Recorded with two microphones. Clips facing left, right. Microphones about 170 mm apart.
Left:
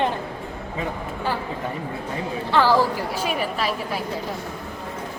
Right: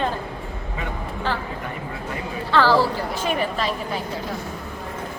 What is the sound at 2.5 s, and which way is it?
A woman's voice, 15° left (ahead or behind).